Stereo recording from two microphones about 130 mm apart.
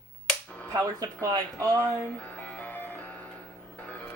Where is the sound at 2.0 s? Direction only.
15° left (ahead or behind).